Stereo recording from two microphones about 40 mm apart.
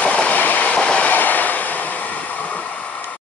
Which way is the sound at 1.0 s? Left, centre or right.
Left.